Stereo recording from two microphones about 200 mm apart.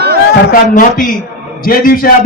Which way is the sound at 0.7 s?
45° left (ahead or behind).